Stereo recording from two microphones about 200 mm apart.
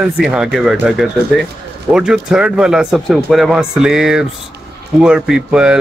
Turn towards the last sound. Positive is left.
turn(degrees=-5)  # may be behind; listen again after turning